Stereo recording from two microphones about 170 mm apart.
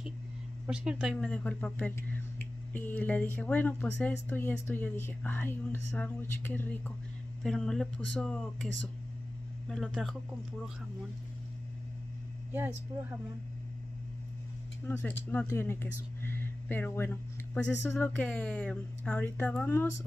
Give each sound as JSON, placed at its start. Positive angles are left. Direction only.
{"t": 0.7, "sound": "speech", "side_deg": -5}
{"t": 14.9, "sound": "speech", "side_deg": 10}
{"t": 16.2, "sound": "a sound", "side_deg": 15}
{"t": 17.6, "sound": "speech", "side_deg": 10}